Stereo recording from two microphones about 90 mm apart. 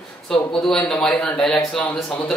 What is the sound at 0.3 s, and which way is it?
Speech, 5° left (ahead or behind).